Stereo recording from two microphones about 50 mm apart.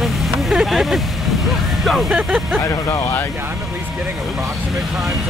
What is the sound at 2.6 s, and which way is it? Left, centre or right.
Speech, left.